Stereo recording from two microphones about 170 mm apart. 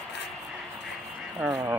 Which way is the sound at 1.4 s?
5° right (ahead or behind).